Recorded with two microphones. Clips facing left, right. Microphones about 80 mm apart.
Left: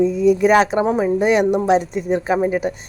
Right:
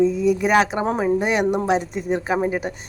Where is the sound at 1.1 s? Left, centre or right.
Right.